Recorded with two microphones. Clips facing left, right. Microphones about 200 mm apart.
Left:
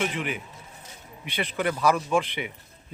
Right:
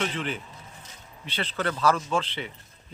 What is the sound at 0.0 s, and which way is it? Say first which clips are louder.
A man's voice: left 1 dB; 10° left (ahead or behind).